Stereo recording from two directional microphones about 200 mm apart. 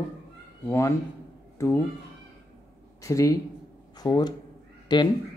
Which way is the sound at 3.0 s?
15° left (ahead or behind).